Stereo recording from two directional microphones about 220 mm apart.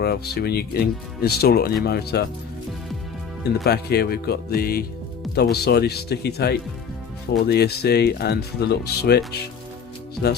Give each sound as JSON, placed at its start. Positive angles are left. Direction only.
{"t": 0.0, "sound": "speech", "side_deg": 45}
{"t": 3.6, "sound": "speech", "side_deg": 45}